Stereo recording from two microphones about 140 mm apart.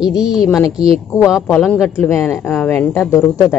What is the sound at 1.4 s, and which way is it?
Speech, 10° left (ahead or behind).